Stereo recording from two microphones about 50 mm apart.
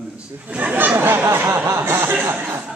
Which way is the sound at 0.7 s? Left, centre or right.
Right.